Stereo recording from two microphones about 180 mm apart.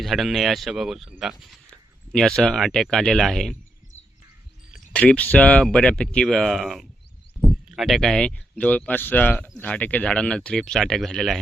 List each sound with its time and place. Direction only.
0.0 s speech: centre (ahead or behind)
4.7 s speech: 5° left (ahead or behind)